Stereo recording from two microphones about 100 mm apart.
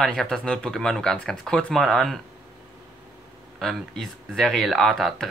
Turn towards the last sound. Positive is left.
turn(degrees=0)  # may be behind; listen again after turning